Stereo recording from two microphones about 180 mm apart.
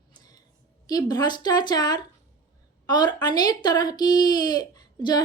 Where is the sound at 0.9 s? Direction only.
20° left (ahead or behind).